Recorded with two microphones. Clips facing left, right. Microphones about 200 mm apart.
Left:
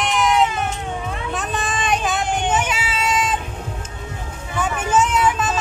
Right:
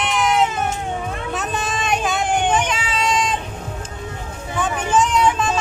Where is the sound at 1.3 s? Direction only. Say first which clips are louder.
Even; centre (ahead or behind).